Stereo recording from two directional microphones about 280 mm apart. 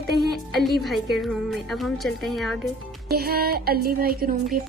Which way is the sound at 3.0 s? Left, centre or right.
Right.